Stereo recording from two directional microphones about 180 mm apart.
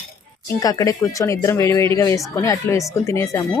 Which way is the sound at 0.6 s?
20° left (ahead or behind).